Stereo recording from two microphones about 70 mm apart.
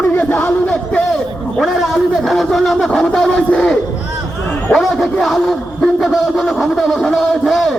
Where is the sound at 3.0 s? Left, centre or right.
Centre.